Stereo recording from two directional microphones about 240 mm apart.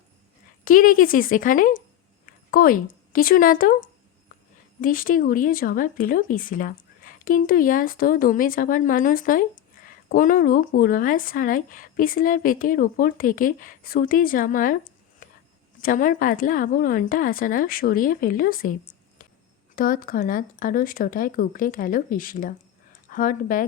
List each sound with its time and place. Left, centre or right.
0.6 s a woman's voice: left
15.2 s a sound: left
15.8 s speech: left